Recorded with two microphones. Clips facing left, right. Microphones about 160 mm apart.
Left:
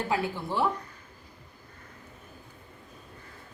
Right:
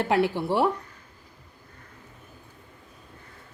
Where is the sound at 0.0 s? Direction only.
75° right (ahead or behind).